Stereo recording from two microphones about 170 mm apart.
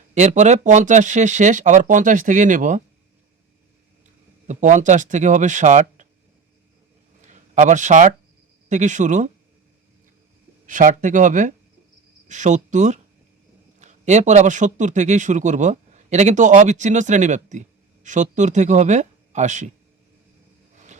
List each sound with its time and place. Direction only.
0.1 s speech: 45° right (ahead or behind)
4.4 s speech: 45° right (ahead or behind)
7.2 s a sound: 45° right (ahead or behind)
8.7 s speech: 45° right (ahead or behind)
10.7 s speech: 50° right (ahead or behind)